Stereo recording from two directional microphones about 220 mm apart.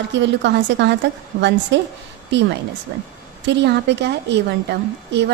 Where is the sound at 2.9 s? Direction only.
50° right (ahead or behind).